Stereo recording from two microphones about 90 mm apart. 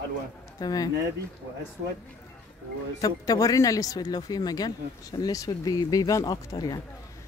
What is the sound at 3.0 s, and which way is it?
Speech, 40° left (ahead or behind).